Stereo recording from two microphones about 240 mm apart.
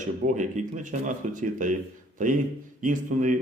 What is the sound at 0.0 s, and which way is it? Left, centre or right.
A man's voice, right.